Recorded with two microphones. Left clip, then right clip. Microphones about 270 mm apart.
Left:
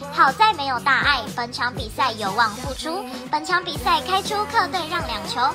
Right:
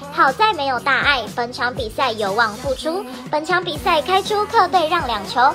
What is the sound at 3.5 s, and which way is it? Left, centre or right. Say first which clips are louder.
A woman's voice: right 2 dB; centre.